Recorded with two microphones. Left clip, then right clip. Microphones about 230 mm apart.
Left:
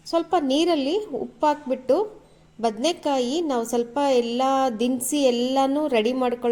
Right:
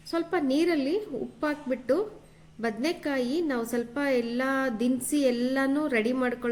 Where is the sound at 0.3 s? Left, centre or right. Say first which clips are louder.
Left 4 dB; centre.